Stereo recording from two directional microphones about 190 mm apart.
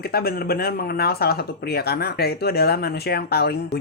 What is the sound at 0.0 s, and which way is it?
Speech, 55° left (ahead or behind).